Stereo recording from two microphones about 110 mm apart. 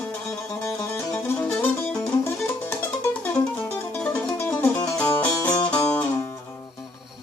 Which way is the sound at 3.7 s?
20° left (ahead or behind).